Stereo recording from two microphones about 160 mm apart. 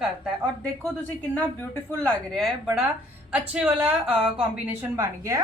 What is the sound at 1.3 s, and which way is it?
A woman's voice, 10° left (ahead or behind).